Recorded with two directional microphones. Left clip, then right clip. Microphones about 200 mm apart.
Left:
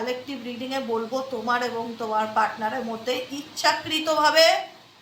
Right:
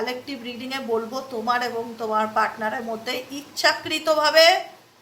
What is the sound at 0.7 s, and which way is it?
A woman's voice, 55° right (ahead or behind).